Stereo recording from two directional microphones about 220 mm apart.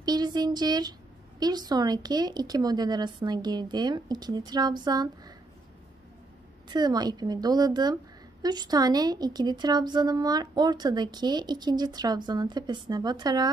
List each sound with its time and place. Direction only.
0.0 s speech: 20° right (ahead or behind)
6.7 s a woman's voice: 20° right (ahead or behind)